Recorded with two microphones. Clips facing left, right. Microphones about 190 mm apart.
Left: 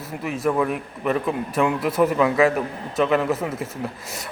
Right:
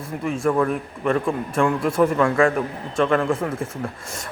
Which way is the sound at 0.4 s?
5° left (ahead or behind).